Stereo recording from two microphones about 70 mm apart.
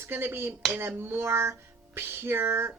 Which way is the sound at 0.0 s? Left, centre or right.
Right.